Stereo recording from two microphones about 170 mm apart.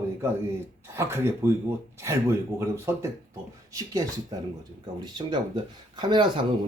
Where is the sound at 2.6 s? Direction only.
15° right (ahead or behind).